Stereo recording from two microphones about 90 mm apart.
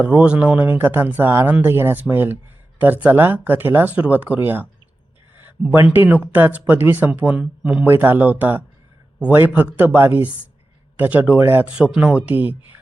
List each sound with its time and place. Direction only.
0.0 s speech: 20° right (ahead or behind)
7.9 s speech: 25° right (ahead or behind)
9.7 s speech: 20° right (ahead or behind)